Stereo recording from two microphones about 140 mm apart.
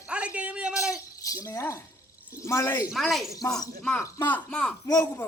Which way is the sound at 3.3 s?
25° left (ahead or behind).